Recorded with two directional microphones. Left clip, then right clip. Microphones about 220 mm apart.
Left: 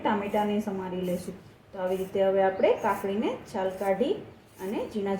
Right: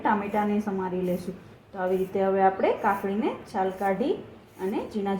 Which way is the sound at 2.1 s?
20° right (ahead or behind).